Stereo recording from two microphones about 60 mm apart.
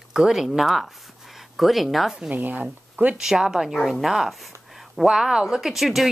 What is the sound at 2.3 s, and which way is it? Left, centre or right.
Speech, right.